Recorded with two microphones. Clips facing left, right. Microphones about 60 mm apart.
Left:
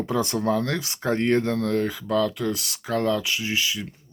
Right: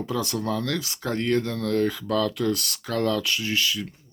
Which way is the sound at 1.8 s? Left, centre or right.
Centre.